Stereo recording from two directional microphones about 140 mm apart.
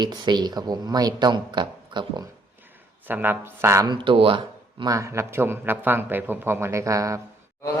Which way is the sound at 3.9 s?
35° right (ahead or behind).